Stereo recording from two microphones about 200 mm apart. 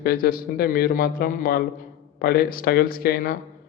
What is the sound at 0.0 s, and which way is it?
A man's voice, 50° left (ahead or behind).